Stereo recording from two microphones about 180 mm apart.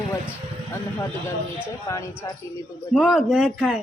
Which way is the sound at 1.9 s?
15° left (ahead or behind).